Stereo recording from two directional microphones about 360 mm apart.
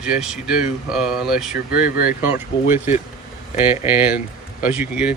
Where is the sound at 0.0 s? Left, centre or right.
Centre.